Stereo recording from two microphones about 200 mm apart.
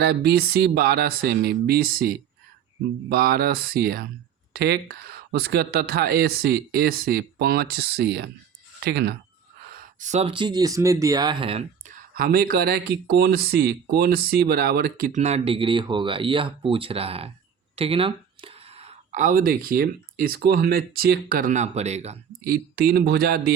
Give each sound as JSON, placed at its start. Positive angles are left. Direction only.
{"t": 0.0, "sound": "speech", "side_deg": -55}
{"t": 10.0, "sound": "speech", "side_deg": -35}
{"t": 12.1, "sound": "speech", "side_deg": -45}
{"t": 22.4, "sound": "speech", "side_deg": -50}